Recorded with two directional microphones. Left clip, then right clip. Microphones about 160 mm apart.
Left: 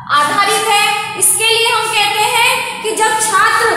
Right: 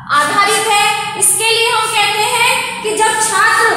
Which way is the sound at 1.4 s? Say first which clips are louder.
Left 1 dB; 20° left (ahead or behind).